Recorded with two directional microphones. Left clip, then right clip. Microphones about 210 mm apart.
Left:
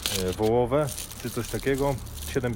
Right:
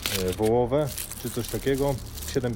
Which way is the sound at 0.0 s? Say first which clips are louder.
Even; 5° right (ahead or behind).